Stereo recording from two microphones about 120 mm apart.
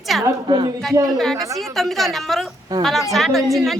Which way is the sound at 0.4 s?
40° right (ahead or behind).